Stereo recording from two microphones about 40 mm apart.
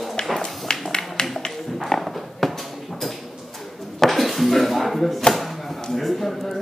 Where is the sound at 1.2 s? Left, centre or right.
Centre.